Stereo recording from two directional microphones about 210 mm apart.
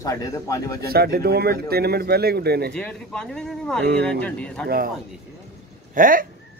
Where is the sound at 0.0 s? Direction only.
15° left (ahead or behind).